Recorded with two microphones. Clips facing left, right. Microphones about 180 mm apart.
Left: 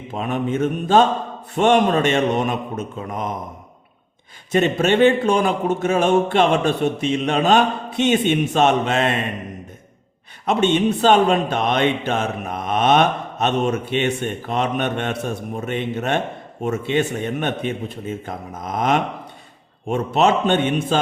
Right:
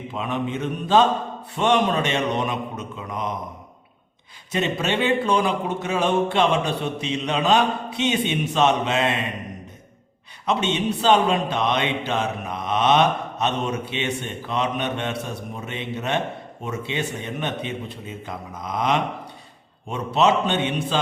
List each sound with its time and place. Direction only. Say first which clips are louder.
0.1 s speech: left 4 dB; 45° left (ahead or behind)
4.5 s speech: left 7 dB; 50° left (ahead or behind)
10.4 s speech: left 5 dB; 50° left (ahead or behind)